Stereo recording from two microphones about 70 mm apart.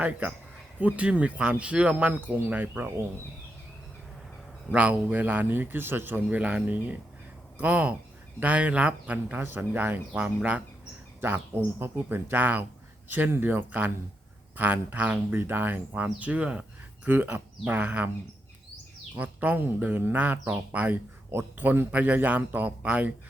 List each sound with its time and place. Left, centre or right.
0.0 s speech: right
4.7 s speech: centre
10.1 s speech: centre
11.2 s speech: right
19.1 s speech: right